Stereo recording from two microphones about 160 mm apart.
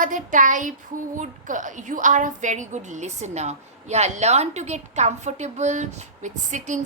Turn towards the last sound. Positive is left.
turn(degrees=-50)  # may be behind; listen again after turning